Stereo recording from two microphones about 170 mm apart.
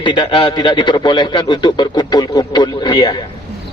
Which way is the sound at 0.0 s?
30° left (ahead or behind).